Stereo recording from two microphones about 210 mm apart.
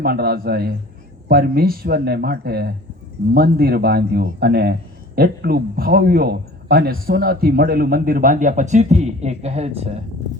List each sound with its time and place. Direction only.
0.0 s a man's voice: 45° right (ahead or behind); by 10.0 s 30° right (ahead or behind)